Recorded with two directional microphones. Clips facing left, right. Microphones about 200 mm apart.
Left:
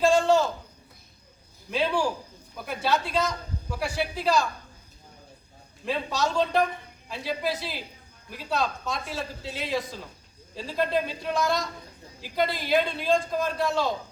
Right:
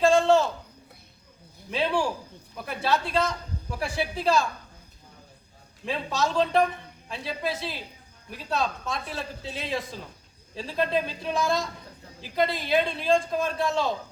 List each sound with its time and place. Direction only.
0.0 s a sound: centre (ahead or behind)
1.7 s a man's voice: centre (ahead or behind)
5.8 s a man's voice: centre (ahead or behind)